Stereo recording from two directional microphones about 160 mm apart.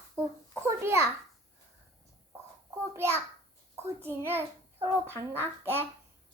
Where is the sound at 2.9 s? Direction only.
15° right (ahead or behind).